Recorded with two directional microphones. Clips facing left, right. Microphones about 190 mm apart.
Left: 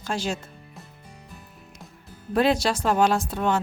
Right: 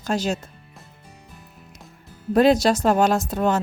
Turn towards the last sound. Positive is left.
turn(degrees=-40)  # may be behind; listen again after turning